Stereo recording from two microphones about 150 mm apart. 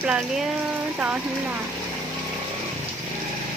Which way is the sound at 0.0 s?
5° right (ahead or behind).